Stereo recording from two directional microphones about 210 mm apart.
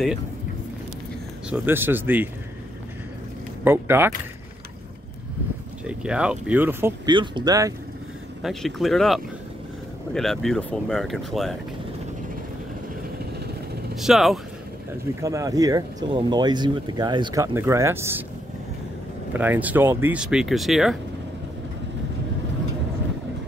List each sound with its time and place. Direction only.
1.5 s speech: 10° right (ahead or behind)
3.6 s speech: 10° right (ahead or behind)
5.9 s speech: 5° right (ahead or behind)
8.4 s speech: centre (ahead or behind)
13.9 s speech: centre (ahead or behind)
15.1 s speech: 15° right (ahead or behind)
19.3 s speech: 10° right (ahead or behind)